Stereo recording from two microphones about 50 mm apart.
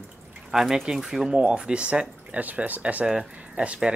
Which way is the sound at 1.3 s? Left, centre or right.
Right.